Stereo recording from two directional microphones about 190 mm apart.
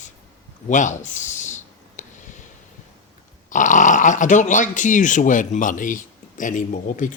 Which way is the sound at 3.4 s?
40° left (ahead or behind).